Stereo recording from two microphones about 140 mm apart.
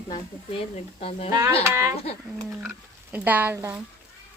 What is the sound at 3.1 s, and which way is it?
Speech, 10° right (ahead or behind).